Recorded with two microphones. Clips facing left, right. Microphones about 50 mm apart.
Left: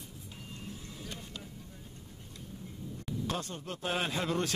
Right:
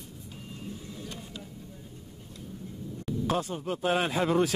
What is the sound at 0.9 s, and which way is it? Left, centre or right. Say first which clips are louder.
Vehicle: right 3 dB; centre.